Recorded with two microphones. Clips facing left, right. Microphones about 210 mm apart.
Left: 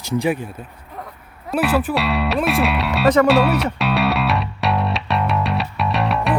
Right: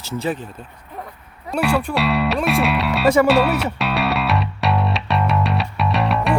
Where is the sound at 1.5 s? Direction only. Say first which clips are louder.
Left 1 dB; 5° left (ahead or behind).